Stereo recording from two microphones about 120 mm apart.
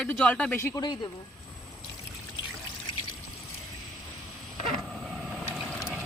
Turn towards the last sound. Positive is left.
turn(degrees=-5)  # may be behind; listen again after turning